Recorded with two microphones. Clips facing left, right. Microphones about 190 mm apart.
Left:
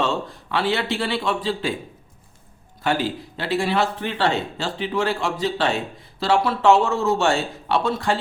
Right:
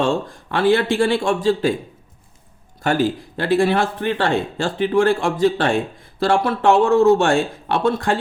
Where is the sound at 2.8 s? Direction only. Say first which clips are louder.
Right 4 dB; 45° right (ahead or behind).